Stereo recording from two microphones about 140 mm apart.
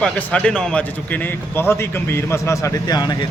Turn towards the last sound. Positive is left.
turn(degrees=30)  # may be behind; listen again after turning